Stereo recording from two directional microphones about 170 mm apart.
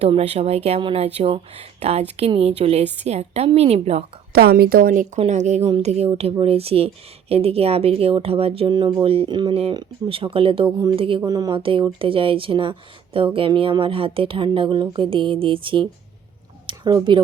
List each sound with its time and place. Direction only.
0.0 s speech: 35° right (ahead or behind)
4.3 s speech: 65° right (ahead or behind); by 17.2 s 30° right (ahead or behind)